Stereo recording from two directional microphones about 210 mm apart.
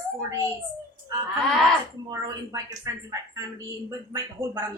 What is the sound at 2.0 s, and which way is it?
Speech, 15° right (ahead or behind).